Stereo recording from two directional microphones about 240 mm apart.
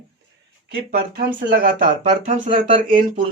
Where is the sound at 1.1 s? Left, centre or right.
Right.